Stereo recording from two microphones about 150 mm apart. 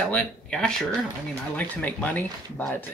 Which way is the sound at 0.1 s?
5° left (ahead or behind).